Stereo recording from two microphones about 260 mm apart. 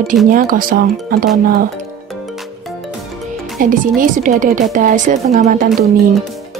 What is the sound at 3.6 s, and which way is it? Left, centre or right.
Speech, right.